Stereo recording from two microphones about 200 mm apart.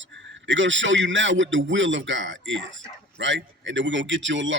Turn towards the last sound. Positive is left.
turn(degrees=-65)  # may be behind; listen again after turning